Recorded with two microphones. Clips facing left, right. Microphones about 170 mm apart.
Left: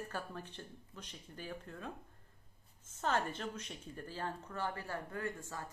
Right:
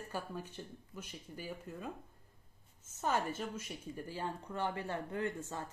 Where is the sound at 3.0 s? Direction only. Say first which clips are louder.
Right 1 dB; 10° right (ahead or behind).